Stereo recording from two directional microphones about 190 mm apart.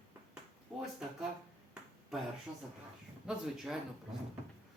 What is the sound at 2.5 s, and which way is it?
Speech, 25° right (ahead or behind).